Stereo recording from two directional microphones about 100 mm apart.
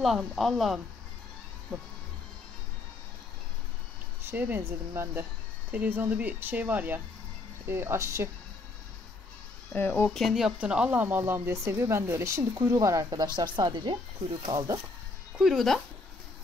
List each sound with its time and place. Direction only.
0.0 s speech: centre (ahead or behind)
1.7 s music: 10° left (ahead or behind)
4.3 s speech: 20° right (ahead or behind)
9.8 s speech: 20° left (ahead or behind)
10.0 s speech: centre (ahead or behind); by 13.9 s 45° right (ahead or behind)
14.5 s speech: 35° right (ahead or behind)
15.3 s speech: centre (ahead or behind)